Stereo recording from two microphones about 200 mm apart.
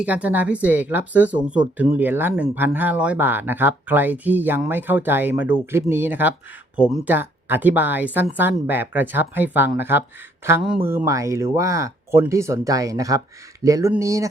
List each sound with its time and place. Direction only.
0.0 s speech: 5° right (ahead or behind)